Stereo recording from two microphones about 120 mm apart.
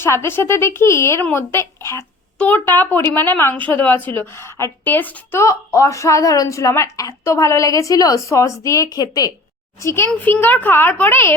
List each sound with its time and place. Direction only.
0.0 s speech: 20° left (ahead or behind)
9.8 s a child's voice: 20° left (ahead or behind)